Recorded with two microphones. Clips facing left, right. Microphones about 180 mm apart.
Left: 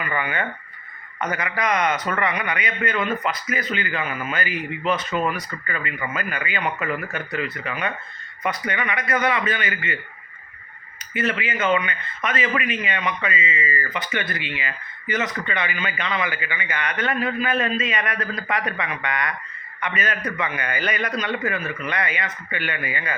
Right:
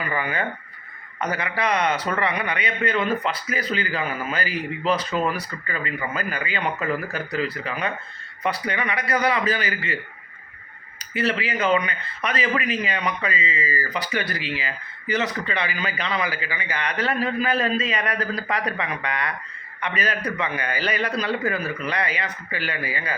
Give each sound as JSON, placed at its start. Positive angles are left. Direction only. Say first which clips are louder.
{"t": 0.0, "sound": "a man's voice", "louder": "even", "side_deg": -35}
{"t": 11.1, "sound": "a man's voice", "louder": "right 1 dB", "side_deg": -35}